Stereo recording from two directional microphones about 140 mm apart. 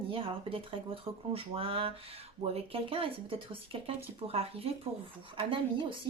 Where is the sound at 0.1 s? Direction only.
40° right (ahead or behind).